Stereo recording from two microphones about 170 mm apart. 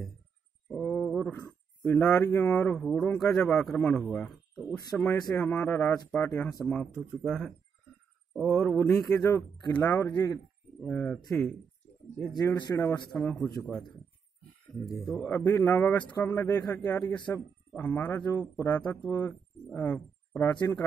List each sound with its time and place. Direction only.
0.7 s speech: 10° left (ahead or behind)
9.0 s speech: 20° left (ahead or behind); by 11.5 s centre (ahead or behind)
12.4 s speech: 20° left (ahead or behind)
14.9 s speech: centre (ahead or behind)
15.2 s speech: 10° left (ahead or behind)